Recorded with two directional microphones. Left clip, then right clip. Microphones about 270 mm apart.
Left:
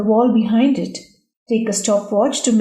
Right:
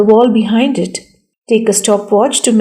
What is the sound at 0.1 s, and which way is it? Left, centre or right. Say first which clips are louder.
A woman's voice: right 7 dB; right.